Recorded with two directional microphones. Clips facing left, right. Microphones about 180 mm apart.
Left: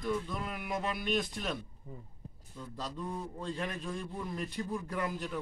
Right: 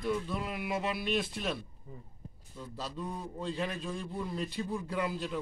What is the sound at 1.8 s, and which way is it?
Speech, 25° left (ahead or behind).